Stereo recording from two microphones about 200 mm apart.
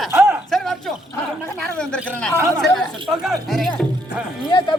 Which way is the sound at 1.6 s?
5° left (ahead or behind).